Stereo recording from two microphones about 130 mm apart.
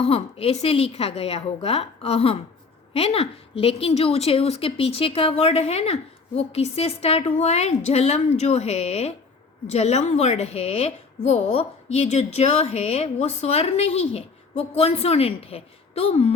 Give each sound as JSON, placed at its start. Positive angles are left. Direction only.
{"t": 0.0, "sound": "a woman's voice", "side_deg": 50}